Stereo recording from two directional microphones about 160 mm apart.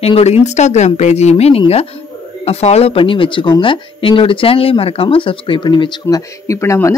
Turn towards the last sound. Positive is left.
turn(degrees=20)  # may be behind; listen again after turning